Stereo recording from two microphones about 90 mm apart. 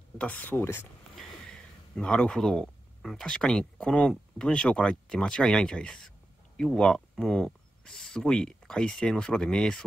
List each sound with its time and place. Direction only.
0.2 s speech: 15° left (ahead or behind)
1.1 s speech: 10° left (ahead or behind)